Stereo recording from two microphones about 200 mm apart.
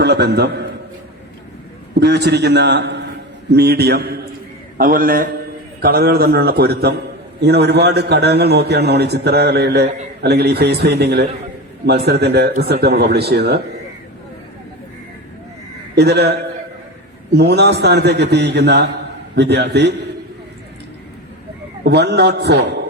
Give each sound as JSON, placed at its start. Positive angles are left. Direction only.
{"t": 0.0, "sound": "a man's voice", "side_deg": -55}
{"t": 2.0, "sound": "a man's voice", "side_deg": -55}
{"t": 16.0, "sound": "a man's voice", "side_deg": -55}
{"t": 21.8, "sound": "a man's voice", "side_deg": -55}